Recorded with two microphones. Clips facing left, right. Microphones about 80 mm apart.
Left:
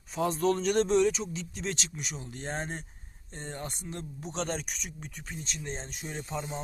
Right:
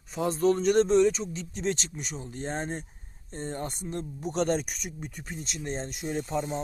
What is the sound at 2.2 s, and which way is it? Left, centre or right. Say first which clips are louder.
Speech: right 5 dB; right.